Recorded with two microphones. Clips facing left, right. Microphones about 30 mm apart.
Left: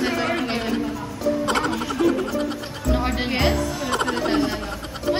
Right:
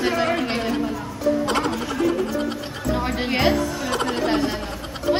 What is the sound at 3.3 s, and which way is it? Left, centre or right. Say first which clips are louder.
A woman's voice: right 4 dB; centre.